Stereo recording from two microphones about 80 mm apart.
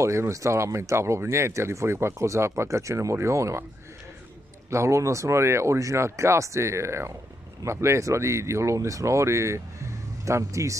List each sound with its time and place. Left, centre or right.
0.0 s speech: right
4.6 s speech: right